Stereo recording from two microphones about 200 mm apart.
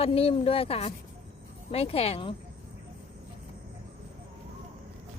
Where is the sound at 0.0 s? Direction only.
30° left (ahead or behind).